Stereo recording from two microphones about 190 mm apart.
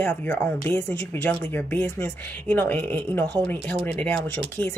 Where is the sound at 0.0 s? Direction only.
10° left (ahead or behind).